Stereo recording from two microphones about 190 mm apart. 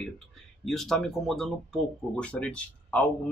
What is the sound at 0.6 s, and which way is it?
Speech, centre (ahead or behind).